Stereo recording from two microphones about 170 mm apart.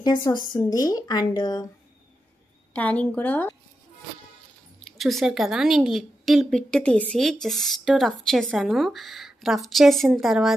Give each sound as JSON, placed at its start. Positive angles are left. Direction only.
{"t": 0.0, "sound": "speech", "side_deg": 25}
{"t": 2.7, "sound": "a woman's voice", "side_deg": 10}
{"t": 4.8, "sound": "a woman's voice", "side_deg": 0}